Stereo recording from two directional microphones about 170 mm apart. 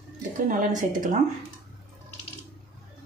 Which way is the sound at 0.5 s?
50° right (ahead or behind).